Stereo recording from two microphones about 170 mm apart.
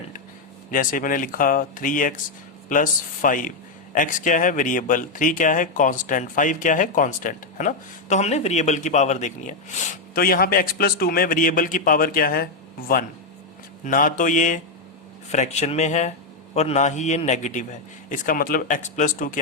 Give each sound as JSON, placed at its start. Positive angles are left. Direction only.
{"t": 0.7, "sound": "speech", "side_deg": 55}
{"t": 10.2, "sound": "speech", "side_deg": 60}
{"t": 13.8, "sound": "speech", "side_deg": 50}